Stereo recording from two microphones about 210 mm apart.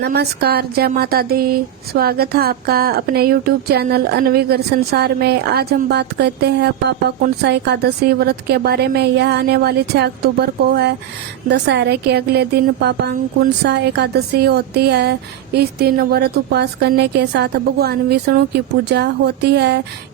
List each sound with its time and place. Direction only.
0.0 s speech: 50° right (ahead or behind)